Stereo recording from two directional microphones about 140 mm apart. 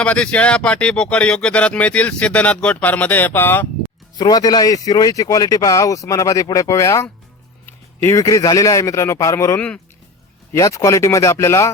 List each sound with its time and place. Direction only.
0.0 s speech: 10° left (ahead or behind)
4.2 s speech: 30° left (ahead or behind)
9.6 s speech: 10° left (ahead or behind)
10.5 s speech: 25° left (ahead or behind)